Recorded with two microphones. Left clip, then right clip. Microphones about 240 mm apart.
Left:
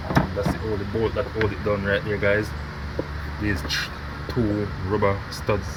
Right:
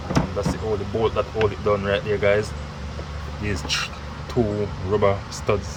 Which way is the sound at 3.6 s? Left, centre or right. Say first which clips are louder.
Right 5 dB; centre.